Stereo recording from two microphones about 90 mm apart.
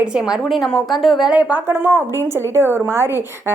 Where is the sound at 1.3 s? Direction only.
15° right (ahead or behind).